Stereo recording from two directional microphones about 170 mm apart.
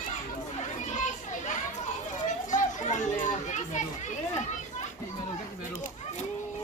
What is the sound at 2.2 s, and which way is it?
Children playing, 45° left (ahead or behind).